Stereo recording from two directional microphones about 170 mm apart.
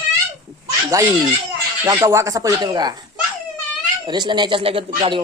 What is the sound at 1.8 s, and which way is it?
Speech, 15° right (ahead or behind).